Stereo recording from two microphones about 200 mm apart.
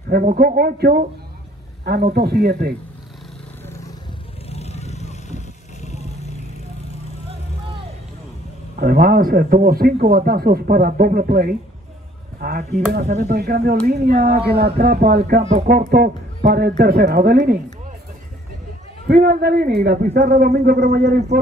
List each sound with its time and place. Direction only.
0.1 s a man's voice: 45° right (ahead or behind)
2.1 s a man's voice: 50° right (ahead or behind)
3.6 s a sound: 15° left (ahead or behind)
4.5 s vehicle: 30° left (ahead or behind)
8.7 s a man's voice: 50° right (ahead or behind)
19.0 s a man's voice: 50° right (ahead or behind)